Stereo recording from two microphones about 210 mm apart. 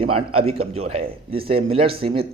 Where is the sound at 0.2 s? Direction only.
25° right (ahead or behind).